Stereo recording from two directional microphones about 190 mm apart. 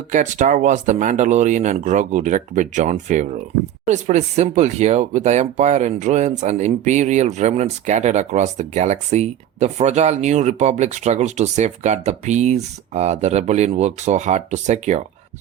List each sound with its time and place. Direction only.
0.1 s speech: 40° right (ahead or behind)